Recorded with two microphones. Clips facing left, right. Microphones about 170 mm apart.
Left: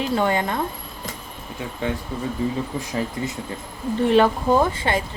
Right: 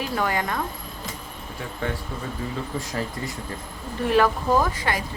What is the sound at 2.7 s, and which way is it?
Speech, 15° left (ahead or behind).